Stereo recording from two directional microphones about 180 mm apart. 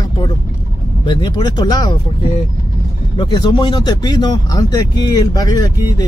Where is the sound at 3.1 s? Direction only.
25° left (ahead or behind).